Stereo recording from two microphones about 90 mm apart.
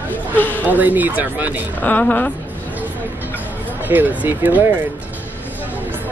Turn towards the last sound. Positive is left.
turn(degrees=-20)  # may be behind; listen again after turning